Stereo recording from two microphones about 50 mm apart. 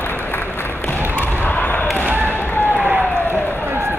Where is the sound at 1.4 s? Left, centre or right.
Left.